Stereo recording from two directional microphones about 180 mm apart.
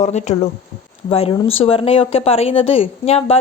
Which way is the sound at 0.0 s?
40° left (ahead or behind).